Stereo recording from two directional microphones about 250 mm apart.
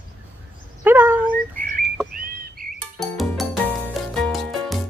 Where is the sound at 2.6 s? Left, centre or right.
Right.